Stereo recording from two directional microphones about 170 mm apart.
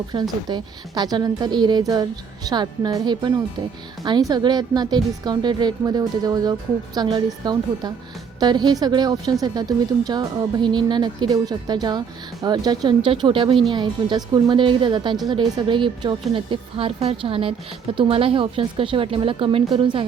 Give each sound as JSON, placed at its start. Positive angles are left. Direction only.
{"t": 0.1, "sound": "a woman's voice", "side_deg": -25}